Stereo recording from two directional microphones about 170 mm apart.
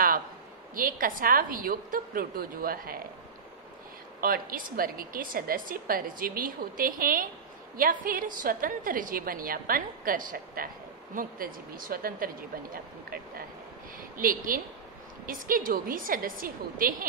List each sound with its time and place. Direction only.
0.7 s a woman's voice: 55° right (ahead or behind)
4.2 s a woman's voice: 60° right (ahead or behind)
14.1 s a woman's voice: 55° right (ahead or behind)